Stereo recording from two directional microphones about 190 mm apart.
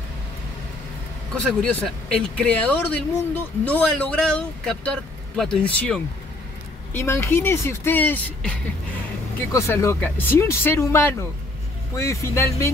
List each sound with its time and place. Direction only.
1.3 s speech: 5° left (ahead or behind)